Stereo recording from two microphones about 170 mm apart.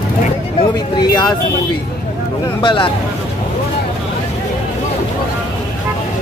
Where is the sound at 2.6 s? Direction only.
30° left (ahead or behind).